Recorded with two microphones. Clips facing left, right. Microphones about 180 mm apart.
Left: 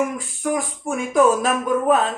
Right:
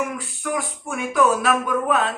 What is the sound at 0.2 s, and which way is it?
Speech, 45° left (ahead or behind).